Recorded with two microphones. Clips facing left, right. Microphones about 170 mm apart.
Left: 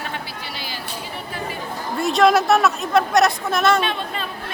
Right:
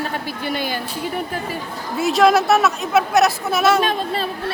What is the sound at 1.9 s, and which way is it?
Speech, centre (ahead or behind).